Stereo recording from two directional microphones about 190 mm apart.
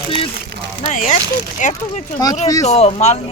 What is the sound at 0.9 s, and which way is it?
Speech, 40° left (ahead or behind).